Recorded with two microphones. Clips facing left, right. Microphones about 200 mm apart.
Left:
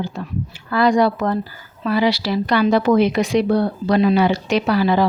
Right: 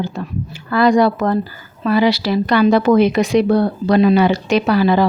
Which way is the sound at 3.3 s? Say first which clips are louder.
Right 3 dB; 55° right (ahead or behind).